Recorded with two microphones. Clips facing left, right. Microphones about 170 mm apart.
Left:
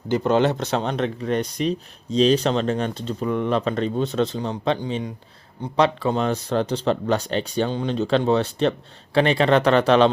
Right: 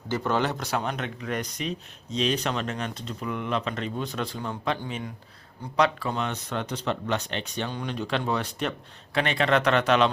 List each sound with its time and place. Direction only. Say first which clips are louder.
0.1 s speech: left 7 dB; 20° left (ahead or behind)